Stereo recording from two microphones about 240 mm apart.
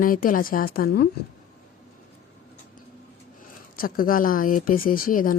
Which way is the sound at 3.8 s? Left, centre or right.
Left.